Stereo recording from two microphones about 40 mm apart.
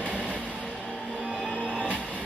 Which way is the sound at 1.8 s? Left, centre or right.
Left.